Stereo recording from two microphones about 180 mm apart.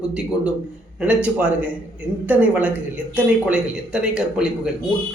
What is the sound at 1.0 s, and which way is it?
Speech, 5° right (ahead or behind).